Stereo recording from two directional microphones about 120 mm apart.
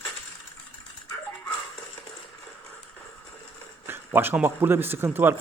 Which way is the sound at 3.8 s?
20° right (ahead or behind).